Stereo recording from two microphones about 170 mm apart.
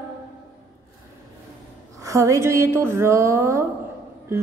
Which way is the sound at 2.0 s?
20° right (ahead or behind).